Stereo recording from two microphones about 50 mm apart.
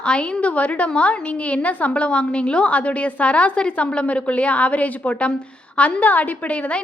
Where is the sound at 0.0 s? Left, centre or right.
Centre.